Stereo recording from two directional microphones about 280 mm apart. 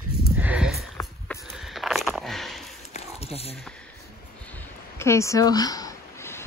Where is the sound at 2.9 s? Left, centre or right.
Left.